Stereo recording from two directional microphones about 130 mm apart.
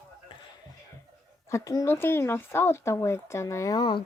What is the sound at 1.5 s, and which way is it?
Speech, 25° left (ahead or behind).